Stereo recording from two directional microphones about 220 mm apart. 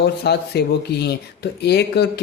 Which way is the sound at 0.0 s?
50° left (ahead or behind).